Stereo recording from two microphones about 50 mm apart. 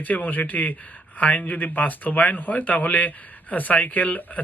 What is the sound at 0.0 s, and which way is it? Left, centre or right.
Speech, left.